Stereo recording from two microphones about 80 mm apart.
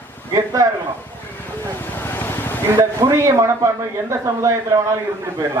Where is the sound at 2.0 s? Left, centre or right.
Left.